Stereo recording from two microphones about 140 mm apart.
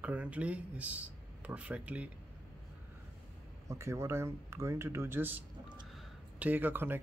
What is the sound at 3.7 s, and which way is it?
Speech, 20° right (ahead or behind).